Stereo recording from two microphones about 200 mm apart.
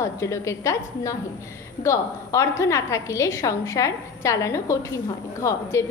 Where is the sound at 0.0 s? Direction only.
15° left (ahead or behind).